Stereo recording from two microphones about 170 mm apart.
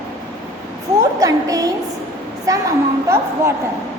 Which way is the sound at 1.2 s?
20° right (ahead or behind).